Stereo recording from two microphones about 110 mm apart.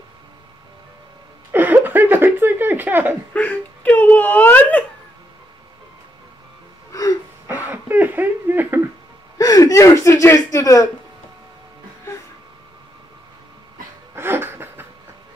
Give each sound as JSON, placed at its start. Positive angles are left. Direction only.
{"t": 1.5, "sound": "a sound", "side_deg": -20}
{"t": 3.3, "sound": "speech", "side_deg": 15}
{"t": 6.9, "sound": "gasp", "side_deg": 35}
{"t": 7.4, "sound": "a sound", "side_deg": -20}
{"t": 9.4, "sound": "speech", "side_deg": 30}
{"t": 14.1, "sound": "laughter", "side_deg": -20}